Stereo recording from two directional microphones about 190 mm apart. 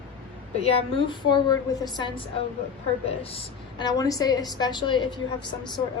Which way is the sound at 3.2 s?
25° left (ahead or behind).